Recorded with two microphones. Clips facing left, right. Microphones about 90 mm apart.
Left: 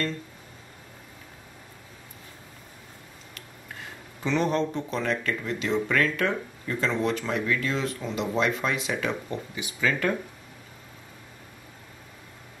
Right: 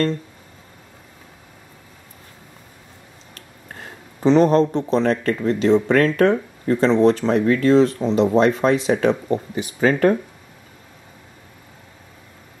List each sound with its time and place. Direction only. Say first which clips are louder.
3.8 s speech: right 14 dB; 35° right (ahead or behind)